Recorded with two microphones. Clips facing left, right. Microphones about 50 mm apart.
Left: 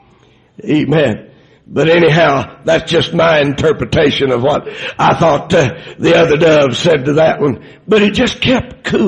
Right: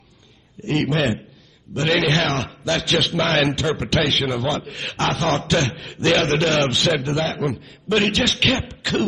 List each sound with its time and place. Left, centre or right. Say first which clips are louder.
0.7 s a man's voice: left 9 dB; left
5.3 s a man's voice: left 9 dB; left
6.1 s a man's voice: left 12 dB; left
8.6 s a sound: left 8 dB; left